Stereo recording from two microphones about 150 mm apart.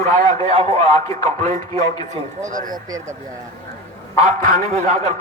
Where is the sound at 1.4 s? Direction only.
50° right (ahead or behind).